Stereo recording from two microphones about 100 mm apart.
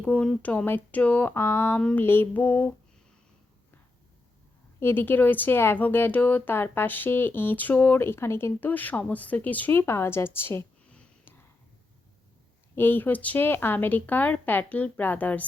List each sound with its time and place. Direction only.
0.0 s speech: 10° left (ahead or behind)
4.8 s speech: 20° left (ahead or behind)
10.8 s sniff: 10° left (ahead or behind)
12.7 s speech: 20° left (ahead or behind)